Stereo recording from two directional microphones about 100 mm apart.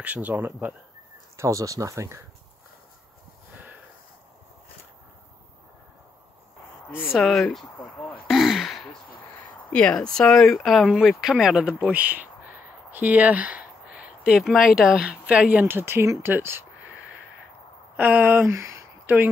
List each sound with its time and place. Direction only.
0.0 s speech: 15° right (ahead or behind)
1.3 s speech: 30° right (ahead or behind)
7.1 s speech: centre (ahead or behind)
8.3 s sigh: centre (ahead or behind)
9.7 s speech: 10° left (ahead or behind); by 16.6 s 20° right (ahead or behind)
17.9 s speech: 15° right (ahead or behind)